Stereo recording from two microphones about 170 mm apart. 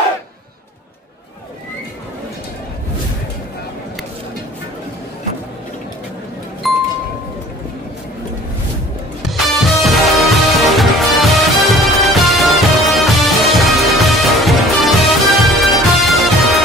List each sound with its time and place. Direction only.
6.6 s music: centre (ahead or behind)
9.3 s music: centre (ahead or behind)